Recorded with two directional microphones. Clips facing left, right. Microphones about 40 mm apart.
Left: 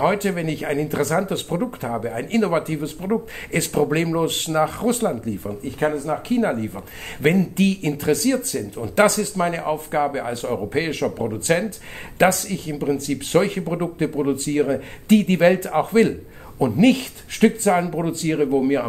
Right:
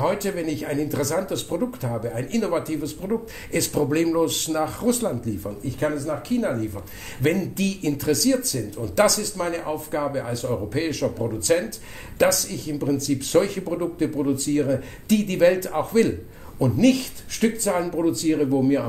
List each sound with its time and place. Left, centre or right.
0.0 s speech: left